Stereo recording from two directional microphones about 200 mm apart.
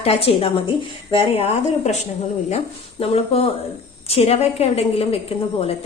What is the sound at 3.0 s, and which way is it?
A woman's voice, 30° left (ahead or behind).